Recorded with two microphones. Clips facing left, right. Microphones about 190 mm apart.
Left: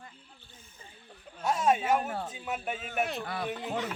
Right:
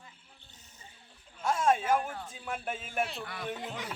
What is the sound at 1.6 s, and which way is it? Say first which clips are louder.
Speech: left 1 dB; 10° left (ahead or behind).